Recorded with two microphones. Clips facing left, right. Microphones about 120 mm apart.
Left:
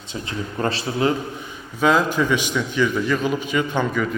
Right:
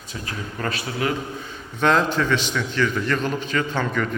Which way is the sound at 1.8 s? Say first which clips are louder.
Left 1 dB; 5° left (ahead or behind).